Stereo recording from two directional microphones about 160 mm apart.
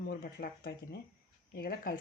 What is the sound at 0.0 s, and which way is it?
Speech, 70° left (ahead or behind).